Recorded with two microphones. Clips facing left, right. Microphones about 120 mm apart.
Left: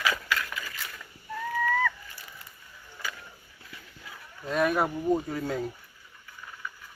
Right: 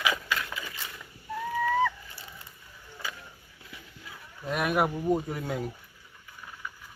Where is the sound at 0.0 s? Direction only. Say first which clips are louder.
Even; 20° right (ahead or behind).